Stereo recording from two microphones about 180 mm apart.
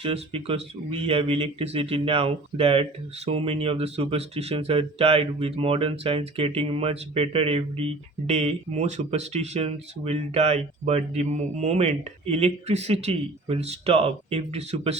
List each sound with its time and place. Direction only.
0.0 s speech: 30° right (ahead or behind)